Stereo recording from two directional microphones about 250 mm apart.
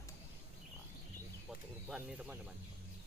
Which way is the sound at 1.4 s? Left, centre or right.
Centre.